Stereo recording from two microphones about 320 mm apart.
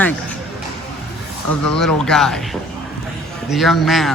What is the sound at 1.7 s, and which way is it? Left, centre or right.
Speech, centre.